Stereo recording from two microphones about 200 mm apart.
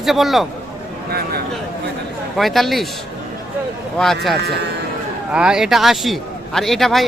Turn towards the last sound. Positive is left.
turn(degrees=0)  # may be behind; listen again after turning